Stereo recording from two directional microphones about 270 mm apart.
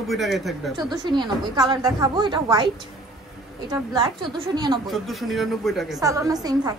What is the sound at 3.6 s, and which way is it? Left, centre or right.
A woman's voice, centre.